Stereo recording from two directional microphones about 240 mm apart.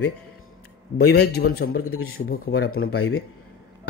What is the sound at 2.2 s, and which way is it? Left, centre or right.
Speech, left.